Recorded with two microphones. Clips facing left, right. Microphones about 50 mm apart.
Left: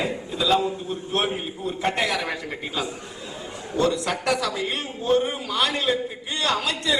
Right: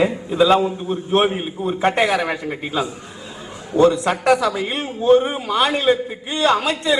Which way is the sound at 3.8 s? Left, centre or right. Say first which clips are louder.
Right 8 dB; right.